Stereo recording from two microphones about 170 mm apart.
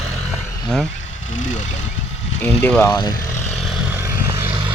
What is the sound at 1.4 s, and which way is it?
Speech, 45° left (ahead or behind).